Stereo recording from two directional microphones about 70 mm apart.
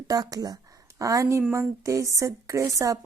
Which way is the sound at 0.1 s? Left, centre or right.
Right.